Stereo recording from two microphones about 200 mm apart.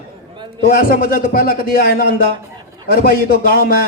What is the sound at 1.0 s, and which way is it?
Speech, 45° left (ahead or behind).